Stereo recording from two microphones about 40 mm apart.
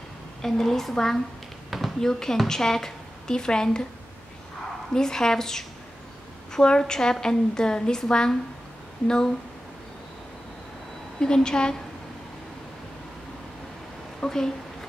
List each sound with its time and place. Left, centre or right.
0.4 s a woman's voice: centre
4.9 s a woman's voice: centre
11.1 s a woman's voice: centre
14.2 s speech: centre